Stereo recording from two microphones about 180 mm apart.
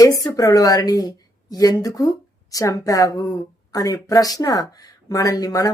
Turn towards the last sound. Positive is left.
turn(degrees=20)  # may be behind; listen again after turning